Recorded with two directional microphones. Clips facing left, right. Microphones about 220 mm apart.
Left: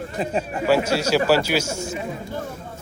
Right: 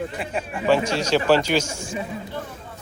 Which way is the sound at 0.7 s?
10° left (ahead or behind).